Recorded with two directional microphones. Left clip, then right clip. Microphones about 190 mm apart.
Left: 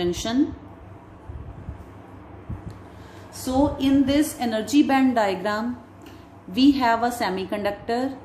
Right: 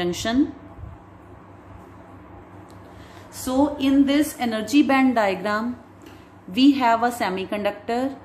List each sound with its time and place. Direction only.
0.0 s a woman's voice: 20° right (ahead or behind)
3.4 s a woman's voice: 20° right (ahead or behind)